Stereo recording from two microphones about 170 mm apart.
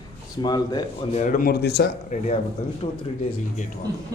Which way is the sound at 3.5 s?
45° left (ahead or behind).